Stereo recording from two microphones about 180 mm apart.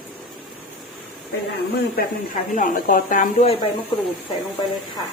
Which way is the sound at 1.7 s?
55° left (ahead or behind).